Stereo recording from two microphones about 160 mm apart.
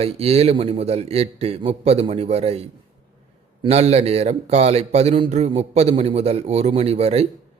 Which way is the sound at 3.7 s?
40° right (ahead or behind).